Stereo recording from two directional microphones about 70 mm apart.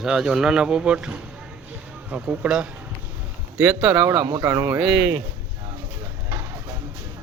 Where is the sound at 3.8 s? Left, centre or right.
Centre.